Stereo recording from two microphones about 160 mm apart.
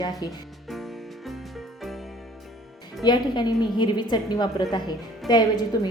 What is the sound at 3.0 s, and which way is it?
A woman's voice, 30° left (ahead or behind).